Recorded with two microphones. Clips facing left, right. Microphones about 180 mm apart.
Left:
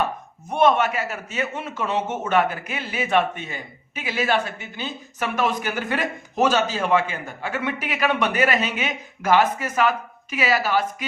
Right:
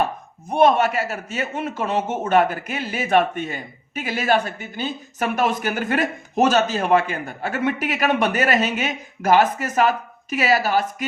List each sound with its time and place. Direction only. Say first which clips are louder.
0.5 s a man's voice: right 2 dB; 35° right (ahead or behind)